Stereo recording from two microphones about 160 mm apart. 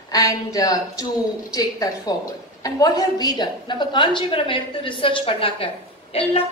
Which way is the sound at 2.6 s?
20° left (ahead or behind).